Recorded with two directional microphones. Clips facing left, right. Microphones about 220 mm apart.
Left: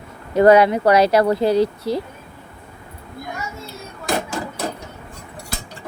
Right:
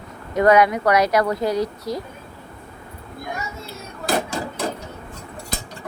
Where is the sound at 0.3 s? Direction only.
30° left (ahead or behind).